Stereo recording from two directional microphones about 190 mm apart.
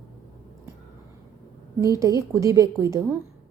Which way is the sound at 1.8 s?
15° right (ahead or behind).